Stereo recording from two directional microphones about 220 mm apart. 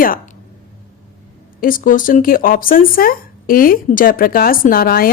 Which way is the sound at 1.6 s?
40° left (ahead or behind).